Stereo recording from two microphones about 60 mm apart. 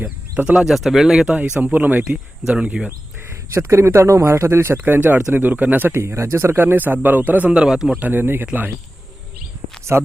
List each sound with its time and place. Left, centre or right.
0.5 s speech: centre
1.6 s speech: right
2.5 s speech: centre
3.5 s speech: right
4.8 s speech: right
6.1 s speech: right; by 7.9 s centre
7.9 s speech: right
9.9 s speech: right